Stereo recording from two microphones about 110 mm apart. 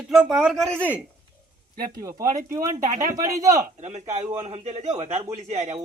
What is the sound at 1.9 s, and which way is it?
Speech, 30° right (ahead or behind).